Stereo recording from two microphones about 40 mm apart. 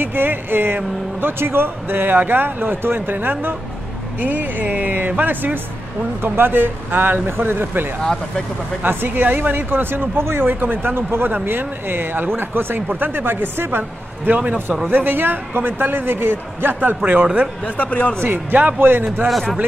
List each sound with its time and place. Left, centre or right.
0.0 s speech: right
6.2 s speech: right
8.0 s speech: centre
8.8 s speech: right
14.4 s a man's voice: right
14.9 s speech: right
17.0 s speech: right
17.6 s speech: left
18.2 s speech: right